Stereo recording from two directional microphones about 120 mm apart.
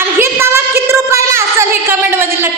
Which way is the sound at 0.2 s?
20° right (ahead or behind).